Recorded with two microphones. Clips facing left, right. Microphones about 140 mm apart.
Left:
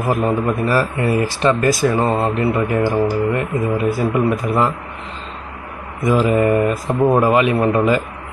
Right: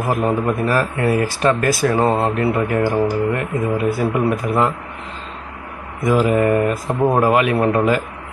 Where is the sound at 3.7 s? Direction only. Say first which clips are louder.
Left 1 dB; centre (ahead or behind).